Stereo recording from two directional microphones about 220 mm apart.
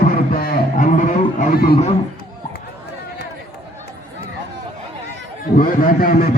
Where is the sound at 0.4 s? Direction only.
40° left (ahead or behind).